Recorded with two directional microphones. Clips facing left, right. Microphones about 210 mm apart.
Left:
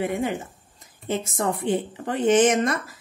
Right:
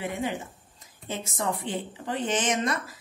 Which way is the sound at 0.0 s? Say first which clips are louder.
Left 5 dB; 50° left (ahead or behind).